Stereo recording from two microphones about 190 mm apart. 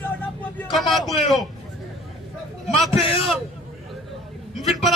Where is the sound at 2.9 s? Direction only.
30° left (ahead or behind).